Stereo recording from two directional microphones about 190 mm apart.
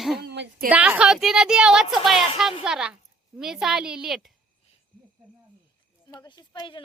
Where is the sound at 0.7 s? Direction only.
10° right (ahead or behind).